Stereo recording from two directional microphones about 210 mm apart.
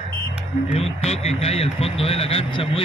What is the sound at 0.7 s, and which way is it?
A man's voice, 30° left (ahead or behind).